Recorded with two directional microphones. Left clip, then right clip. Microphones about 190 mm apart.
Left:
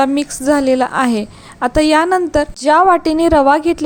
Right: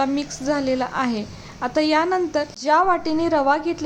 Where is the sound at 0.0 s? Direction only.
40° left (ahead or behind).